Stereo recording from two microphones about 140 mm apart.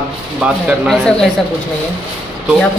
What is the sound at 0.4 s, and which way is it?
Speech, 10° right (ahead or behind).